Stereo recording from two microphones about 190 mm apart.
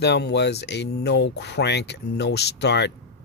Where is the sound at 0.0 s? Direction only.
60° left (ahead or behind).